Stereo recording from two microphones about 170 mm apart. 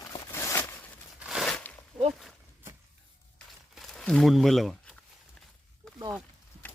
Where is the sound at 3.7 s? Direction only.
5° left (ahead or behind).